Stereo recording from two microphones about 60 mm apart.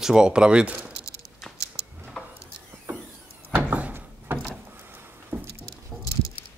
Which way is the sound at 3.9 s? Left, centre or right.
Right.